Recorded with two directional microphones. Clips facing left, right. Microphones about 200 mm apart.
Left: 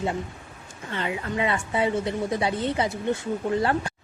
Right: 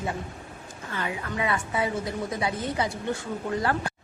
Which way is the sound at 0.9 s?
25° left (ahead or behind).